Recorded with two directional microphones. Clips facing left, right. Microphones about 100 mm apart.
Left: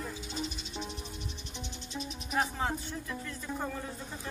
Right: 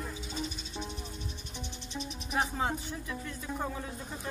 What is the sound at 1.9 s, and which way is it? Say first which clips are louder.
Music: even; centre (ahead or behind).